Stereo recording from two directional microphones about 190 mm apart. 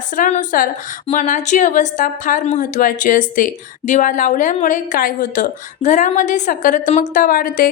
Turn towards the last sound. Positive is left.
turn(degrees=50)  # may be behind; listen again after turning